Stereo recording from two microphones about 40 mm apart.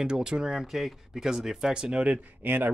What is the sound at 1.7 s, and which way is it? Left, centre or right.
Speech, right.